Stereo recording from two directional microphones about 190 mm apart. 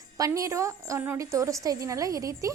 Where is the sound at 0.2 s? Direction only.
15° right (ahead or behind).